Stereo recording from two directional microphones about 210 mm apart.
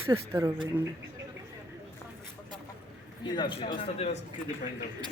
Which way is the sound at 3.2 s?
20° left (ahead or behind).